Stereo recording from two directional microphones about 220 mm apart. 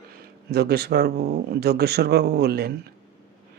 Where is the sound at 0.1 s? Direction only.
45° right (ahead or behind).